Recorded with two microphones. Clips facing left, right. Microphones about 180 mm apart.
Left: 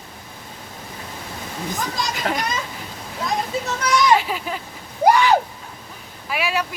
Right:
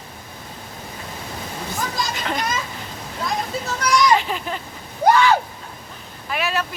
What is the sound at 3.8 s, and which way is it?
Speech, 5° left (ahead or behind).